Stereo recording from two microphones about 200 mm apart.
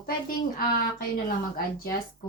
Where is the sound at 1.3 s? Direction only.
45° left (ahead or behind).